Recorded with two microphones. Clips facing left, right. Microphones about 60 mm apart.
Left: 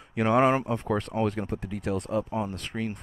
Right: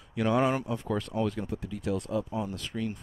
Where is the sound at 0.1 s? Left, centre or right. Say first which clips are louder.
Left 4 dB; left.